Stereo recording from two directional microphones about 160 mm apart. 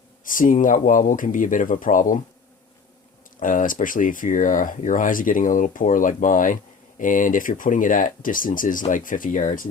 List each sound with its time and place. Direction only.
0.3 s speech: 55° left (ahead or behind)
3.4 s speech: 55° left (ahead or behind)